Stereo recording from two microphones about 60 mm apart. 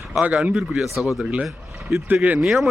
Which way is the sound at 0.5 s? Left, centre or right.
Centre.